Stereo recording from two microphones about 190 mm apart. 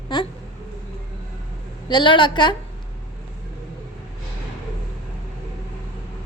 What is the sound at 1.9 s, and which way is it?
Speech, 25° left (ahead or behind).